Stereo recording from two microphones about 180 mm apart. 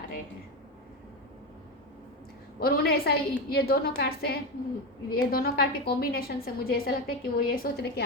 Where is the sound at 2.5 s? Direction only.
55° left (ahead or behind).